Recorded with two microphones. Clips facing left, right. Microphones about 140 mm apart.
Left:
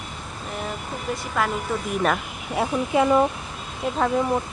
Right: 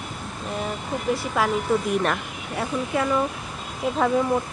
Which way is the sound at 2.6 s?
20° left (ahead or behind).